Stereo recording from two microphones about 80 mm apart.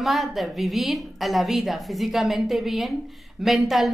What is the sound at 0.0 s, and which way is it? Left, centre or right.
A woman's voice, centre.